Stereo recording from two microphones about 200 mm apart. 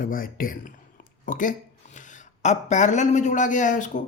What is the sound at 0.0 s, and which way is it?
A woman's voice, 45° left (ahead or behind).